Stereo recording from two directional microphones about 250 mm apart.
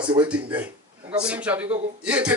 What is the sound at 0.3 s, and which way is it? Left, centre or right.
A man's voice, centre.